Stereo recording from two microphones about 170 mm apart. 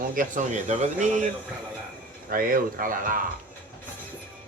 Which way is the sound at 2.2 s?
55° right (ahead or behind).